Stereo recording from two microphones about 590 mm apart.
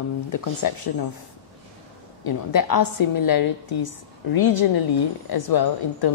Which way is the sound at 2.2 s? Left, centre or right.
Left.